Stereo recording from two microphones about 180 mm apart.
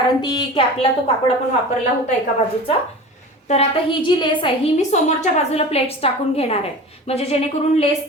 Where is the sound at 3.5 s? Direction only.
30° left (ahead or behind).